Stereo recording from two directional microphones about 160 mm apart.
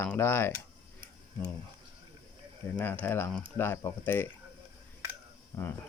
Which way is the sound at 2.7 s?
10° left (ahead or behind).